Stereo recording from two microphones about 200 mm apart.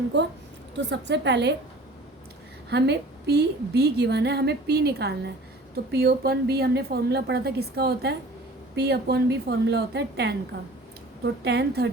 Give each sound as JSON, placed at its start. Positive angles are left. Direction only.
{"t": 0.1, "sound": "a woman's voice", "side_deg": -60}
{"t": 2.6, "sound": "a woman's voice", "side_deg": -55}